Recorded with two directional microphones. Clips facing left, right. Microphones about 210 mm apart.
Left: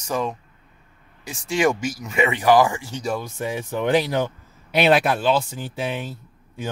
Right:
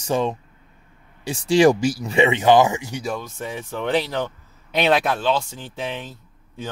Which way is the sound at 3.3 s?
10° left (ahead or behind).